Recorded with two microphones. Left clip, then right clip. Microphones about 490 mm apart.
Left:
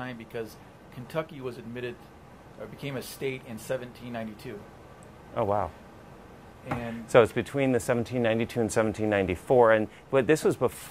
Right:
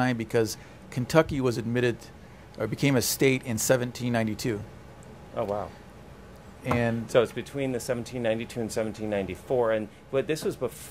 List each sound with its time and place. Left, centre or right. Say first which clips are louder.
0.0 s speech: right 11 dB; right
5.3 s speech: left 3 dB; left
7.1 s speech: left 6 dB; left